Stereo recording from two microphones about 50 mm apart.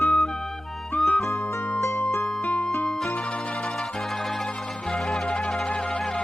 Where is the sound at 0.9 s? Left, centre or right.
Left.